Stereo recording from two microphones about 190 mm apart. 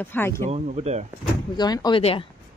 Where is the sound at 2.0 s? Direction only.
30° left (ahead or behind).